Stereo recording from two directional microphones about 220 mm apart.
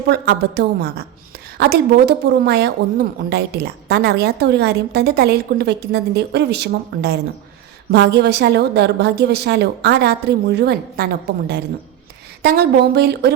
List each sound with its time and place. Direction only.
0.1 s speech: 50° right (ahead or behind)